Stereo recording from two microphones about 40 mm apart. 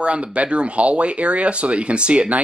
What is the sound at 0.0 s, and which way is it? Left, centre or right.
Speech, right.